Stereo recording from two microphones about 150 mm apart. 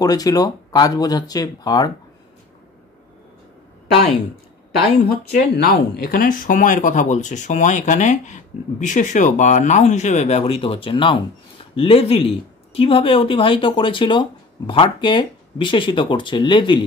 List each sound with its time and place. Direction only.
0.0 s speech: 25° left (ahead or behind)
5.1 s speech: 90° left; by 16.8 s 35° left (ahead or behind)